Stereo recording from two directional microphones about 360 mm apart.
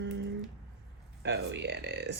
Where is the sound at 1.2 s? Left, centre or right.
Right.